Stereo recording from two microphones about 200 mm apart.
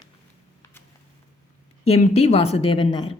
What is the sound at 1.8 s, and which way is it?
Speech, 30° left (ahead or behind).